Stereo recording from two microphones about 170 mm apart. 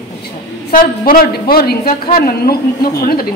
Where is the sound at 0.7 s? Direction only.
55° left (ahead or behind).